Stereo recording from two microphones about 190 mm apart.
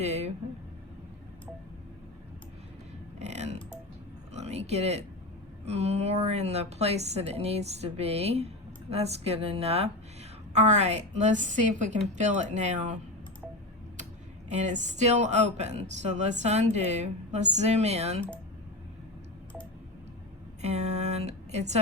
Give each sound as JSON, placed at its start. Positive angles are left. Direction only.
{"t": 0.0, "sound": "a woman's voice", "side_deg": -35}
{"t": 3.2, "sound": "music", "side_deg": -35}
{"t": 4.4, "sound": "a woman's voice", "side_deg": -35}
{"t": 14.5, "sound": "a woman's voice", "side_deg": -40}
{"t": 20.6, "sound": "a sound", "side_deg": -35}